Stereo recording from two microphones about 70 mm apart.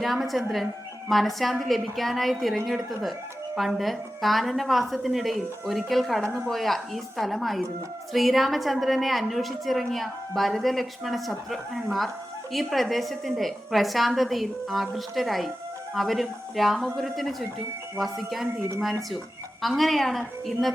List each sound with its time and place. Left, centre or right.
0.0 s a woman's voice: centre